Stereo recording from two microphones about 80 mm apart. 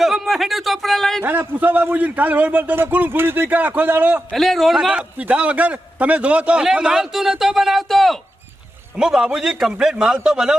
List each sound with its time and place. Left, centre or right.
0.0 s speech: centre
1.2 s a man's voice: right
4.3 s a man's voice: centre
9.0 s a man's voice: centre